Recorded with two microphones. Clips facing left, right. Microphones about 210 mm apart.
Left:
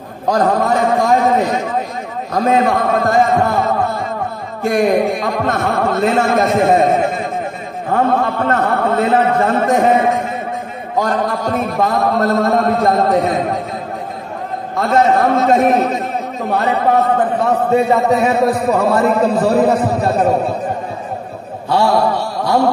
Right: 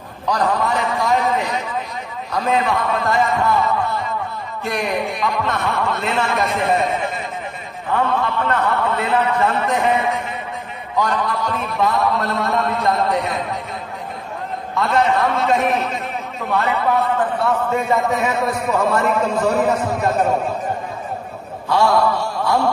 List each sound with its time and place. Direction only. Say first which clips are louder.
0.3 s a man's voice: left 5 dB; 45° left (ahead or behind)
14.8 s a man's voice: left 4 dB; 45° left (ahead or behind)
21.6 s a man's voice: left 2 dB; 35° left (ahead or behind)